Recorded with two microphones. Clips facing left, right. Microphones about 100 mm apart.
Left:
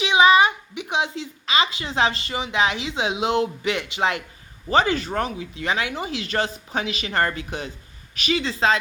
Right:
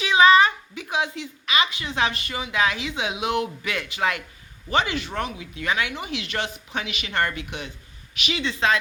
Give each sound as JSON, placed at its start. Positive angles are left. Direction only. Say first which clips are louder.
{"t": 0.0, "sound": "a woman's voice", "louder": "even", "side_deg": 20}
{"t": 4.7, "sound": "speech", "louder": "left 4 dB", "side_deg": 35}